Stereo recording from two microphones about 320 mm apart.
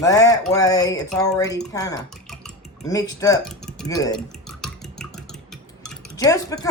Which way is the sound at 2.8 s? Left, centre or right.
Centre.